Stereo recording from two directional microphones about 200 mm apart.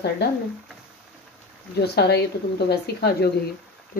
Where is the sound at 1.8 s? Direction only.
55° left (ahead or behind).